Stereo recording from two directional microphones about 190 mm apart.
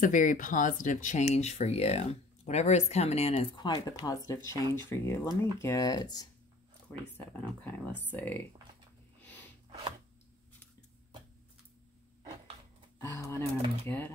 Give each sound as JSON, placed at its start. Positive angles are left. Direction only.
{"t": 0.0, "sound": "speech", "side_deg": 40}
{"t": 6.9, "sound": "speech", "side_deg": 10}
{"t": 9.2, "sound": "a sound", "side_deg": 10}
{"t": 13.0, "sound": "speech", "side_deg": 15}